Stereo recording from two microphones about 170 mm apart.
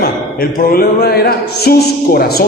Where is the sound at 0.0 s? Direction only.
60° left (ahead or behind).